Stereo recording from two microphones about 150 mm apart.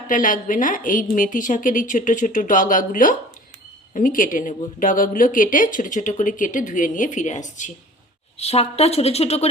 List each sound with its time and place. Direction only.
0.1 s speech: 60° left (ahead or behind)
8.4 s a woman's voice: 45° left (ahead or behind)